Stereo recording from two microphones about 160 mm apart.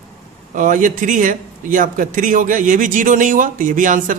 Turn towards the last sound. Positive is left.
turn(degrees=-55)  # may be behind; listen again after turning